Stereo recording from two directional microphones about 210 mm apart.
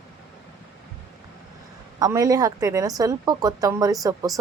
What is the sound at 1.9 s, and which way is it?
A woman's voice, 15° right (ahead or behind).